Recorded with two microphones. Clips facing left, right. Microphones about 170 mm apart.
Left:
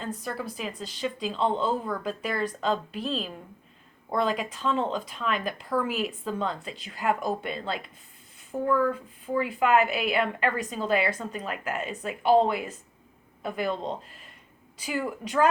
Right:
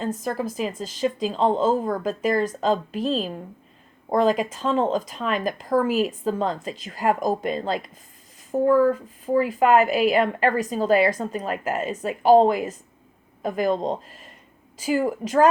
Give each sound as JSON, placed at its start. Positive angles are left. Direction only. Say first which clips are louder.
{"t": 0.0, "sound": "a woman's voice", "louder": "right 7 dB", "side_deg": -40}